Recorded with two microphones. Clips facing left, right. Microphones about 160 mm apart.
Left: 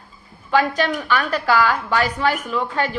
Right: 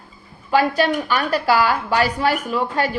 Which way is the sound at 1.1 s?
35° right (ahead or behind).